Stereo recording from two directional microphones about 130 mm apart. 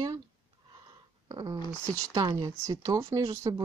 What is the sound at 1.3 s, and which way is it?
Speech, 30° right (ahead or behind).